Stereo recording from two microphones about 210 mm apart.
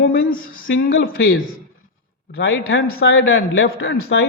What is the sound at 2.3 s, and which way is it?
A man's voice, 55° left (ahead or behind).